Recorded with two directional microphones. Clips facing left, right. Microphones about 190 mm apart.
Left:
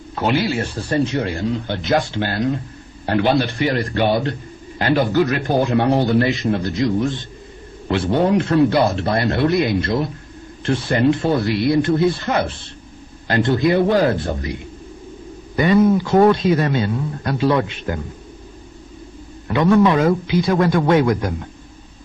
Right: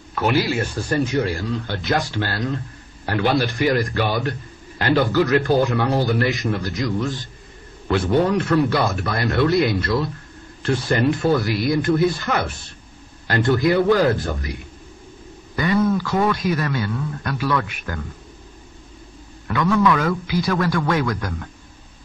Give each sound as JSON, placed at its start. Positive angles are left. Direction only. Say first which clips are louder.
{"t": 0.1, "sound": "speech", "louder": "left 1 dB", "side_deg": 25}
{"t": 5.4, "sound": "speech", "louder": "left 1 dB", "side_deg": 20}
{"t": 8.3, "sound": "speech", "louder": "left 3 dB", "side_deg": 25}
{"t": 19.4, "sound": "speech", "louder": "left 4 dB", "side_deg": 25}